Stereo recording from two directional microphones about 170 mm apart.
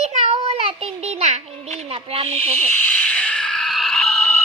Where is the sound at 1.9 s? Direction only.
35° right (ahead or behind).